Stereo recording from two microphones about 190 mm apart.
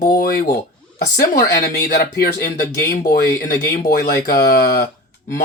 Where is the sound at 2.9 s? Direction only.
50° left (ahead or behind).